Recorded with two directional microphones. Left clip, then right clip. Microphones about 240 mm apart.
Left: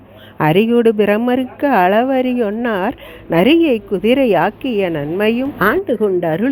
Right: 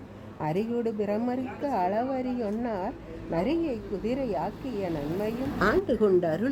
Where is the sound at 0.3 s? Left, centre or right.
Left.